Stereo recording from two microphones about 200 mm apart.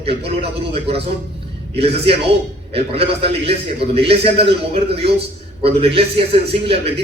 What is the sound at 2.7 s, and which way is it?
A man's voice, 30° right (ahead or behind).